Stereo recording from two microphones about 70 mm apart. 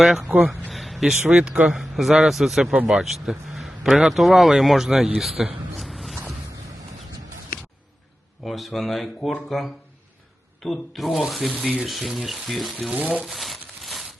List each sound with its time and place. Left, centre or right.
0.0 s speech: centre
0.3 s speech: right
0.7 s speech: centre
5.8 s a sound: centre
8.4 s speech: centre
12.9 s speech: centre
13.2 s crumpling: centre